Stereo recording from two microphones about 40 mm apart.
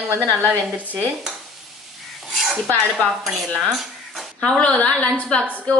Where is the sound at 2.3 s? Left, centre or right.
Centre.